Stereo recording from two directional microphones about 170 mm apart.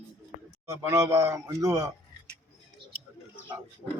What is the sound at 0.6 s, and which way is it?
A man's voice, 15° right (ahead or behind).